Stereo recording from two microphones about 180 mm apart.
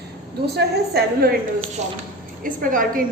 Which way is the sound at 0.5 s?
60° right (ahead or behind).